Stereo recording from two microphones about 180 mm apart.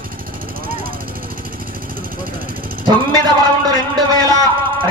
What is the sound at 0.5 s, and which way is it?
Vehicle, 55° right (ahead or behind).